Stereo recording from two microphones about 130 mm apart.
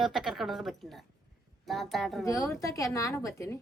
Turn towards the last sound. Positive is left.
turn(degrees=25)  # may be behind; listen again after turning